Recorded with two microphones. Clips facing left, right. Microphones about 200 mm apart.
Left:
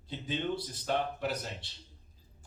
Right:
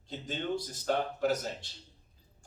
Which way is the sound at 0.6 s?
45° right (ahead or behind).